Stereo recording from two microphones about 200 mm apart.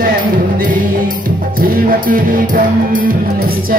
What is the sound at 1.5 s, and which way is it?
Music, 45° right (ahead or behind).